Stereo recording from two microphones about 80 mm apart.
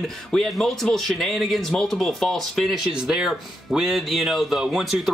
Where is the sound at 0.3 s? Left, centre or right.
Centre.